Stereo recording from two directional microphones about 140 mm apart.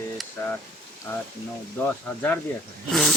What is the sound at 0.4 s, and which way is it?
Boiling, 20° left (ahead or behind).